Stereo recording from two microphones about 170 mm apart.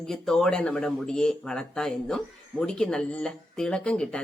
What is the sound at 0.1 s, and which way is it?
Speech, 5° left (ahead or behind).